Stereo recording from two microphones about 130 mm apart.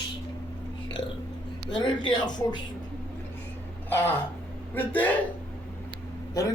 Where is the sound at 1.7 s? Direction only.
35° left (ahead or behind).